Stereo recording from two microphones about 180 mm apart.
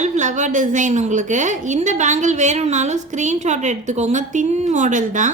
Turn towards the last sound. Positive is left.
turn(degrees=-45)  # may be behind; listen again after turning